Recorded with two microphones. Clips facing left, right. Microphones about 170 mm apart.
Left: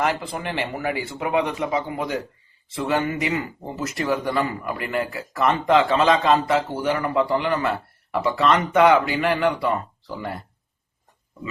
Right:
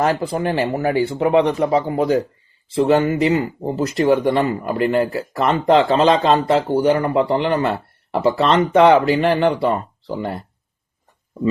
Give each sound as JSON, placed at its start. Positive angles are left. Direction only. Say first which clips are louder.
{"t": 0.0, "sound": "speech", "louder": "right 6 dB", "side_deg": -30}